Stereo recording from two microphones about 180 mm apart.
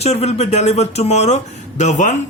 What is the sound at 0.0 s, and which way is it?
Speech, 35° left (ahead or behind).